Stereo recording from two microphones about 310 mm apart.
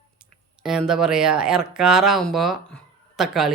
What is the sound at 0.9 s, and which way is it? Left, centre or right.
Speech, centre.